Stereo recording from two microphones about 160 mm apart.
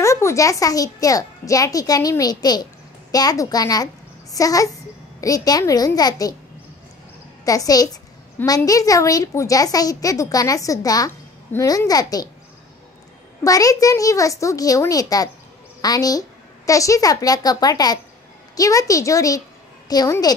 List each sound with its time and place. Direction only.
0.0 s a child's voice: 20° left (ahead or behind)
7.4 s a woman's voice: 20° left (ahead or behind)
13.4 s a woman's voice: 20° left (ahead or behind)